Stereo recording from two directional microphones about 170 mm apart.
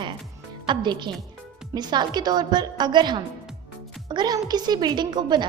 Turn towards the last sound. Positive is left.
turn(degrees=-25)  # may be behind; listen again after turning